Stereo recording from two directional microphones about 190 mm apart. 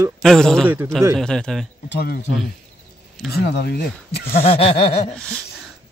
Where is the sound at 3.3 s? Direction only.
60° left (ahead or behind).